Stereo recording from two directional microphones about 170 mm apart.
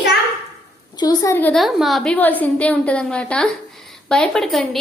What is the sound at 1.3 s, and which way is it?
Speech, 10° left (ahead or behind).